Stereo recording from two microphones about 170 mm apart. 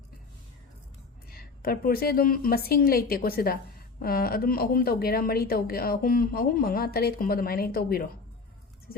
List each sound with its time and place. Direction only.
1.3 s a woman's voice: 60° left (ahead or behind)